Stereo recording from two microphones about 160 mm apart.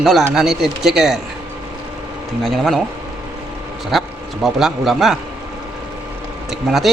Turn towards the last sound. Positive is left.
turn(degrees=0)  # may be behind; listen again after turning